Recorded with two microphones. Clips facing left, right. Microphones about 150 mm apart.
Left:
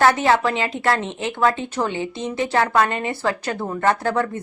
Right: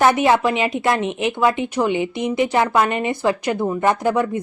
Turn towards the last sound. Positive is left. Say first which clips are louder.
# right 3 dB
turn(degrees=-15)  # may be behind; listen again after turning